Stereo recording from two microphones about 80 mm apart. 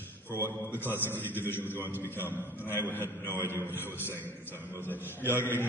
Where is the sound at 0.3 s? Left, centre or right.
Left.